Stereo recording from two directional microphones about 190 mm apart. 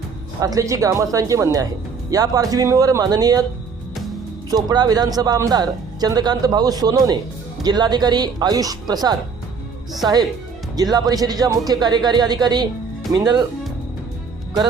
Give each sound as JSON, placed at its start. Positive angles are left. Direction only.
{"t": 0.3, "sound": "speech", "side_deg": -15}
{"t": 4.5, "sound": "speech", "side_deg": -20}